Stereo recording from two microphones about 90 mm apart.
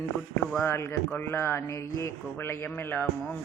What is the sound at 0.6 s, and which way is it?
A man's voice, 30° left (ahead or behind).